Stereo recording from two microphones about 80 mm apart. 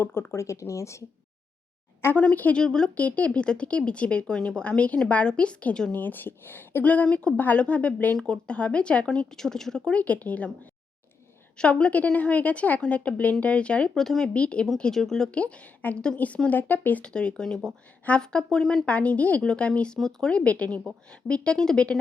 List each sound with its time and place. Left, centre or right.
0.0 s speech: left
2.1 s speech: centre
2.6 s speech: centre
5.9 s speech: left; by 18.9 s centre
18.9 s speech: centre